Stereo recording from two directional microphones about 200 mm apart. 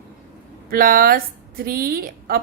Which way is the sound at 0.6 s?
45° right (ahead or behind).